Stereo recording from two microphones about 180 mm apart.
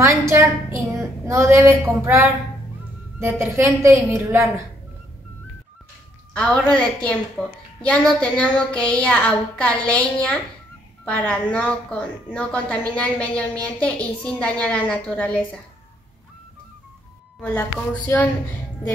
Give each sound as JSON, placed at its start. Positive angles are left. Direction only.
{"t": 0.2, "sound": "a woman's voice", "side_deg": -15}
{"t": 6.3, "sound": "a woman's voice", "side_deg": 5}
{"t": 17.4, "sound": "a woman's voice", "side_deg": 5}